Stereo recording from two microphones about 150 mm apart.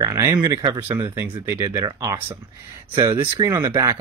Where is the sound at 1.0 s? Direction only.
15° right (ahead or behind).